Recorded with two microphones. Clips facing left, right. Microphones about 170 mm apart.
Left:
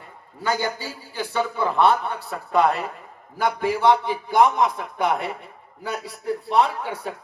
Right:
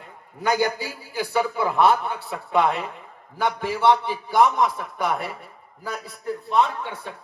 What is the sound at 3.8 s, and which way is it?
Speech, 15° left (ahead or behind).